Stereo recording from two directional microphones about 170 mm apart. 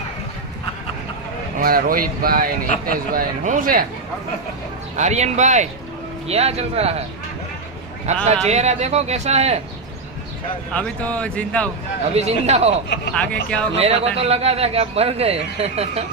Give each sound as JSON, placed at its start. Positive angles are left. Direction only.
{"t": 1.6, "sound": "speech", "side_deg": -60}
{"t": 4.9, "sound": "a man's voice", "side_deg": -45}
{"t": 8.1, "sound": "a man's voice", "side_deg": -40}
{"t": 10.7, "sound": "speech", "side_deg": 5}
{"t": 12.1, "sound": "a man's voice", "side_deg": -40}
{"t": 13.1, "sound": "speech", "side_deg": 5}
{"t": 13.7, "sound": "a man's voice", "side_deg": -35}